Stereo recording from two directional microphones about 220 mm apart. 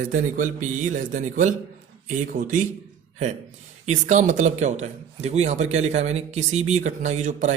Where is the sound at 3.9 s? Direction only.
35° right (ahead or behind).